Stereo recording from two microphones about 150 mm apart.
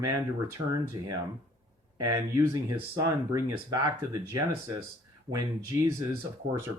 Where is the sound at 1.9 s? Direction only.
25° right (ahead or behind).